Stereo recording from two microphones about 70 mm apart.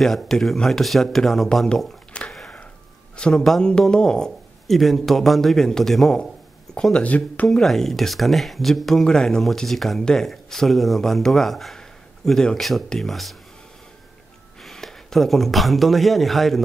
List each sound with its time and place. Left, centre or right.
0.0 s speech: centre
2.1 s a sound: centre
3.2 s speech: centre
7.0 s speech: left
7.4 s speech: centre
14.6 s speech: centre